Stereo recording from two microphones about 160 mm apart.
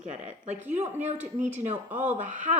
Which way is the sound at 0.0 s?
45° right (ahead or behind).